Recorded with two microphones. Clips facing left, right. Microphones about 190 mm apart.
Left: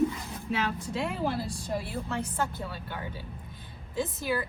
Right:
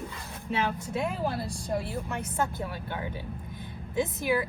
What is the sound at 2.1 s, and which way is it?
Speech, 20° right (ahead or behind).